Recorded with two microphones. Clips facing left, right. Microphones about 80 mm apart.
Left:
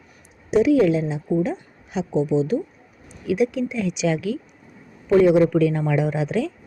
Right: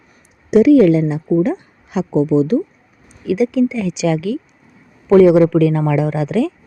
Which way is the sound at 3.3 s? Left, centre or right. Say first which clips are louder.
Right 6 dB; right.